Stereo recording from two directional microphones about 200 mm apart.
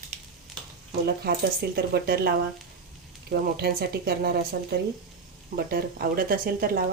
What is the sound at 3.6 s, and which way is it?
Speech, 50° right (ahead or behind).